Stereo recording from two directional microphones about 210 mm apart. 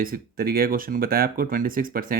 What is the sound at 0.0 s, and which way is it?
Speech, 45° right (ahead or behind).